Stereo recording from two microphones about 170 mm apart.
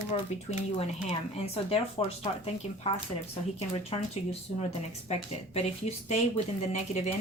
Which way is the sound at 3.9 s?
30° left (ahead or behind).